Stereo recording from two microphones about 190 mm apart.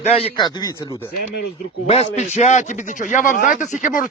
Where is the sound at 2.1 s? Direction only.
35° left (ahead or behind).